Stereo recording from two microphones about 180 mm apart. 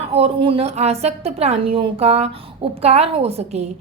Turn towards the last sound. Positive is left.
turn(degrees=-35)  # may be behind; listen again after turning